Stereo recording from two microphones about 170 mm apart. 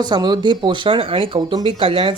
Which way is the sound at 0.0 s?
25° right (ahead or behind).